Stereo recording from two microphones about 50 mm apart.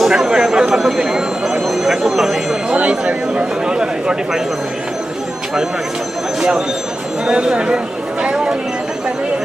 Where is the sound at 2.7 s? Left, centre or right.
Right.